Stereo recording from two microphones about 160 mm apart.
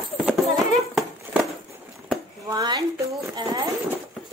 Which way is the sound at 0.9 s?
Centre (ahead or behind).